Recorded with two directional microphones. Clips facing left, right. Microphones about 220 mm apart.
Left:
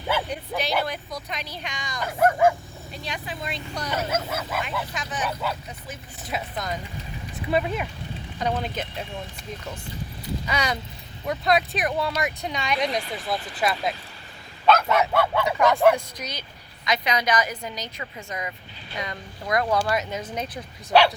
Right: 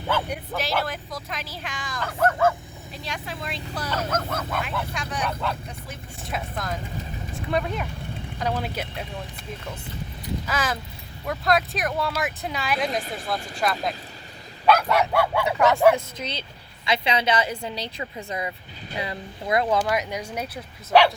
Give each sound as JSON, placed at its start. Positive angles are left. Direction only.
{"t": 0.3, "sound": "speech", "side_deg": 0}
{"t": 2.0, "sound": "speech", "side_deg": 15}
{"t": 2.9, "sound": "speech", "side_deg": 0}
{"t": 8.4, "sound": "speech", "side_deg": -5}
{"t": 10.4, "sound": "speech", "side_deg": 0}
{"t": 14.8, "sound": "speech", "side_deg": 0}
{"t": 15.1, "sound": "speech", "side_deg": -10}
{"t": 16.8, "sound": "a woman's voice", "side_deg": -25}